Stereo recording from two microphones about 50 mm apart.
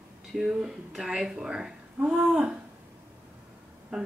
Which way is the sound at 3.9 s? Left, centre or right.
Centre.